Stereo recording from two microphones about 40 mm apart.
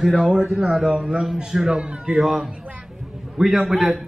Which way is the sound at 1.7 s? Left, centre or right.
Right.